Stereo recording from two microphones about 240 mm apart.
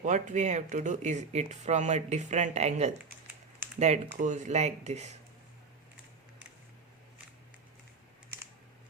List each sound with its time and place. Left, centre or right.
0.0 s speech: right